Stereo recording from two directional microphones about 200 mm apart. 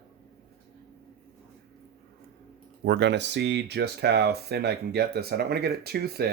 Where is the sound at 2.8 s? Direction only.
60° right (ahead or behind).